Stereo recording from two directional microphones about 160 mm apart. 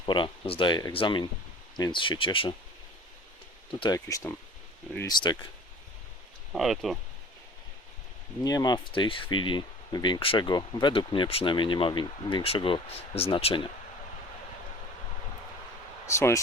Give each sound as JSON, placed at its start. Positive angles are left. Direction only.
{"t": 0.0, "sound": "speech", "side_deg": 30}
{"t": 3.7, "sound": "speech", "side_deg": 30}
{"t": 6.5, "sound": "speech", "side_deg": 0}
{"t": 8.4, "sound": "speech", "side_deg": 25}
{"t": 16.0, "sound": "speech", "side_deg": 15}